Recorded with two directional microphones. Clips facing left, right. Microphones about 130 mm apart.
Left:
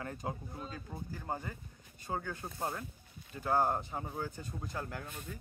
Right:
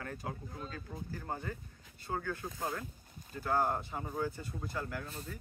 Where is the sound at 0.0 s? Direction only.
20° left (ahead or behind).